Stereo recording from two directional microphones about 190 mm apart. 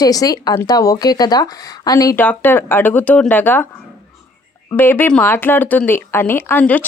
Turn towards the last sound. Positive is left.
turn(degrees=10)  # may be behind; listen again after turning